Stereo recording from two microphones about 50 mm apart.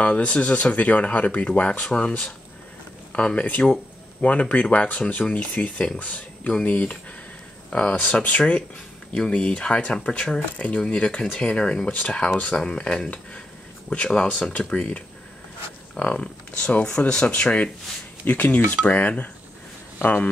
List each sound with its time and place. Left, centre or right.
0.0 s speech: left
11.9 s speech: left
12.5 s speech: centre; by 20.2 s left